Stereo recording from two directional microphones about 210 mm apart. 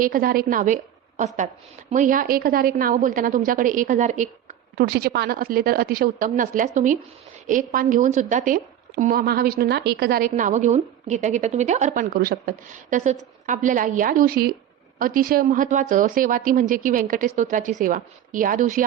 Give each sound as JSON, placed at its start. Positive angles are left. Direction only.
{"t": 0.0, "sound": "a woman's voice", "side_deg": -40}
{"t": 4.8, "sound": "a woman's voice", "side_deg": -50}